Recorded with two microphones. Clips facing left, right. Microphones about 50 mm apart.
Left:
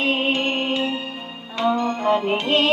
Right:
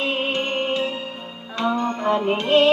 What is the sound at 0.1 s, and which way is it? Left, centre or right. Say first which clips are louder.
Music: left 3 dB; left.